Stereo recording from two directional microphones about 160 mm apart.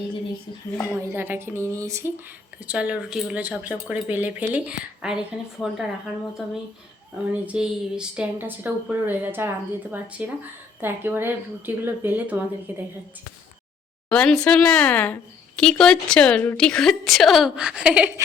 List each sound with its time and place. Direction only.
0.9 s speech: 15° right (ahead or behind)
2.6 s speech: 5° right (ahead or behind)
7.3 s speech: 5° right (ahead or behind)
14.1 s a woman's voice: 5° left (ahead or behind)